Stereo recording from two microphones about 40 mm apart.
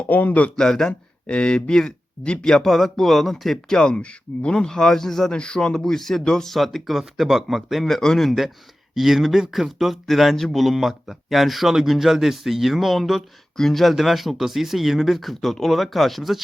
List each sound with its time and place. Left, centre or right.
0.1 s speech: left
0.5 s speech: centre
1.3 s speech: left
2.5 s speech: centre
3.7 s speech: centre
4.5 s speech: centre
5.3 s speech: left; by 7.9 s centre
7.9 s speech: centre
9.0 s speech: centre